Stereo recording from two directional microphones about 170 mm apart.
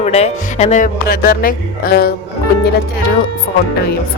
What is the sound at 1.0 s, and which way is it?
Speech, 65° left (ahead or behind).